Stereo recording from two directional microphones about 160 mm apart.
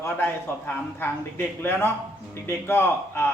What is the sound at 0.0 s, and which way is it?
A man's voice, 15° left (ahead or behind).